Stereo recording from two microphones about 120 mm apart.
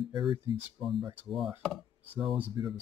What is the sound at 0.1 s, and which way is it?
Speech, 45° right (ahead or behind).